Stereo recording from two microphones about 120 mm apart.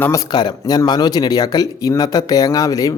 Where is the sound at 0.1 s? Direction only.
35° left (ahead or behind).